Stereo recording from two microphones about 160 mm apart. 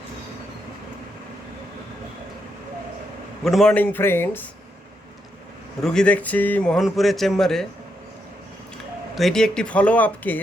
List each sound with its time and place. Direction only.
3.4 s speech: centre (ahead or behind)
5.8 s speech: 5° left (ahead or behind)
9.1 s speech: centre (ahead or behind)